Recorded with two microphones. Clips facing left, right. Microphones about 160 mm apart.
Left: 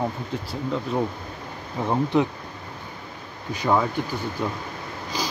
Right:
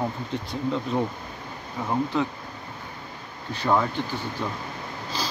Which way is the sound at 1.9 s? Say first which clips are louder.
Left 4 dB; 20° left (ahead or behind).